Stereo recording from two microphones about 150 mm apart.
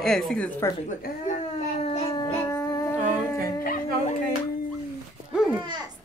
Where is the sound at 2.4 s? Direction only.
20° left (ahead or behind).